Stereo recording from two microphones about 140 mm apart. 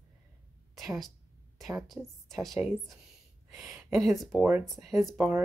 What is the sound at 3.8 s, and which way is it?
Speech, 20° right (ahead or behind).